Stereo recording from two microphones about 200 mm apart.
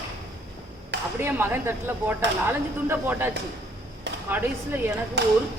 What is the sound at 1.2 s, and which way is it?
Speech, 10° right (ahead or behind).